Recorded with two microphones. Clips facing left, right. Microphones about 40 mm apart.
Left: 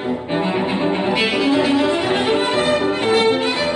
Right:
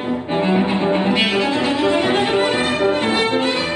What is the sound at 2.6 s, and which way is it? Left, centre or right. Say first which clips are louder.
Violin: even; right.